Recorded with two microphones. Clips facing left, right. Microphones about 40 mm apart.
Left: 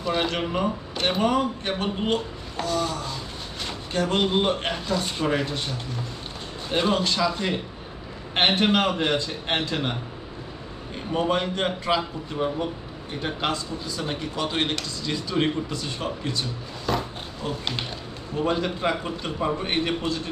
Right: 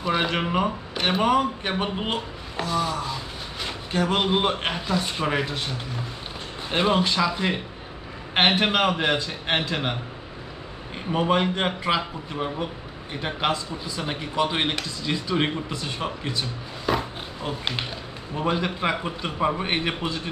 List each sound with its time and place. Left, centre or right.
0.0 s speech: centre
11.1 s speech: centre